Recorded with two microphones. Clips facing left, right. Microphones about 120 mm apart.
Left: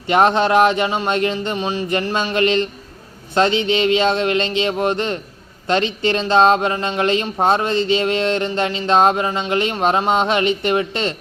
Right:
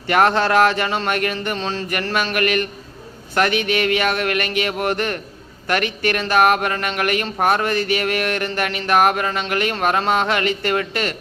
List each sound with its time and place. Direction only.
0.1 s speech: 20° left (ahead or behind)